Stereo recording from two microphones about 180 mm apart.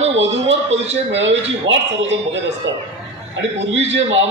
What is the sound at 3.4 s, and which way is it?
Speech, 90° right.